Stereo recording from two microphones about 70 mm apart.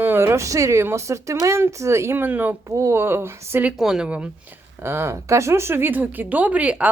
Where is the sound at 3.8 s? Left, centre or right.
Centre.